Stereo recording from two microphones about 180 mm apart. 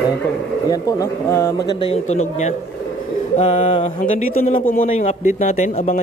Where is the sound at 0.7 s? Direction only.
20° left (ahead or behind).